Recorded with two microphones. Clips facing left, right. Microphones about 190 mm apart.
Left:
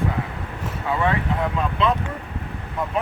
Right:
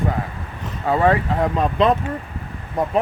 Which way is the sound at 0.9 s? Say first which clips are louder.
Right 5 dB; 40° right (ahead or behind).